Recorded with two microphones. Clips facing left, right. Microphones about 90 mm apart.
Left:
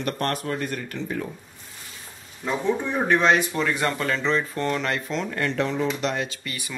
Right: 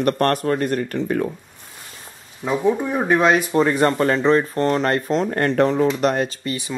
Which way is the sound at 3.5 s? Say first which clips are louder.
Right 8 dB; 40° right (ahead or behind).